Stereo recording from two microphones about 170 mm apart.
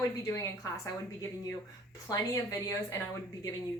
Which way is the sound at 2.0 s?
20° left (ahead or behind).